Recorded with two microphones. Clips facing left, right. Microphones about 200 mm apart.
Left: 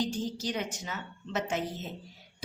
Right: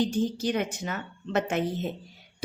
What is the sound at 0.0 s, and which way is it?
A woman's voice, 55° right (ahead or behind).